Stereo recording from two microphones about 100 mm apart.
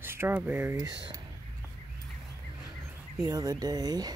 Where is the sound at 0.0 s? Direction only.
25° right (ahead or behind).